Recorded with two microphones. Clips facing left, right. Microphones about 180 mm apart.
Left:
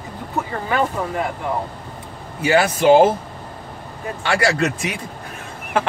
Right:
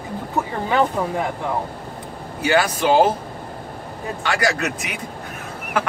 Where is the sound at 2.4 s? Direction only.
25° left (ahead or behind).